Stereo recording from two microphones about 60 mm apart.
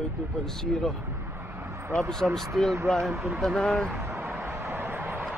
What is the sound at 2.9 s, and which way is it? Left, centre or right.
Speech, centre.